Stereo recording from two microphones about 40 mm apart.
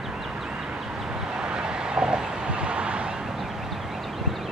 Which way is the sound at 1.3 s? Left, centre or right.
Centre.